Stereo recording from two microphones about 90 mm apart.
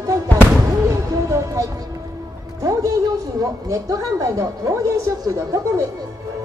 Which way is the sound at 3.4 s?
40° right (ahead or behind).